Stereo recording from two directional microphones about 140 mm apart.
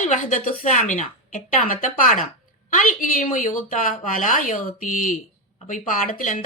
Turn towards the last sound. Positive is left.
turn(degrees=70)  # may be behind; listen again after turning